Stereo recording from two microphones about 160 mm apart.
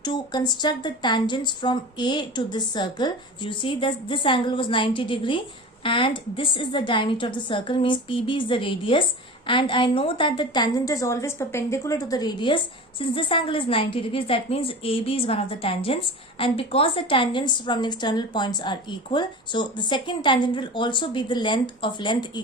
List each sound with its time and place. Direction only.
0.0 s a woman's voice: 25° left (ahead or behind)